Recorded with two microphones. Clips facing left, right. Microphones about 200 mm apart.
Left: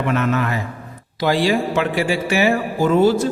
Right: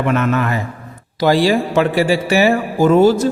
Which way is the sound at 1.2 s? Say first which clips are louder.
Right 4 dB; 40° right (ahead or behind).